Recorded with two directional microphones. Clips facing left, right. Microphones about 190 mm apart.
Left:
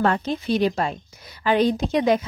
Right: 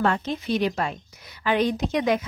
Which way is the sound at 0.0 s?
35° left (ahead or behind).